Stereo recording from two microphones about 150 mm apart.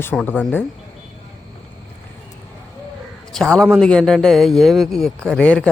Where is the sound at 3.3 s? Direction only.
5° left (ahead or behind).